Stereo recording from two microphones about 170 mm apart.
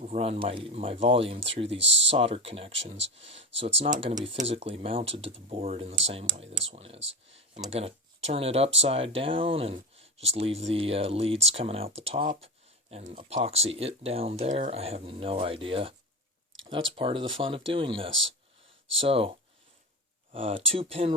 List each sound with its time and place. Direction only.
0.0 s speech: 40° right (ahead or behind)
1.8 s speech: 90° right
2.0 s speech: 35° right (ahead or behind)
20.3 s speech: 35° right (ahead or behind)